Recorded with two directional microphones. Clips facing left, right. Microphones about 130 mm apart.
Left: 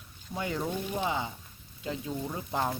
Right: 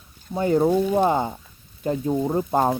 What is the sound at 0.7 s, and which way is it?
Speech, 55° right (ahead or behind).